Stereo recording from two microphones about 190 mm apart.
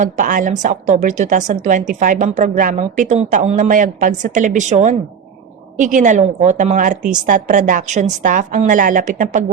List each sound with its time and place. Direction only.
0.0 s a woman's voice: 45° right (ahead or behind)